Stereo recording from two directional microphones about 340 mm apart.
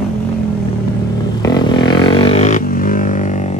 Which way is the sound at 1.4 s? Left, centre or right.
Centre.